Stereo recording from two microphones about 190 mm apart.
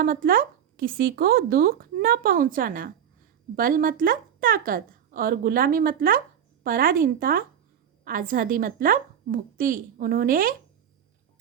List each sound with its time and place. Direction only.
0.0 s a woman's voice: 50° right (ahead or behind)